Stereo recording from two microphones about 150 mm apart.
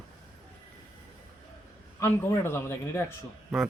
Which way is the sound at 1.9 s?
20° left (ahead or behind).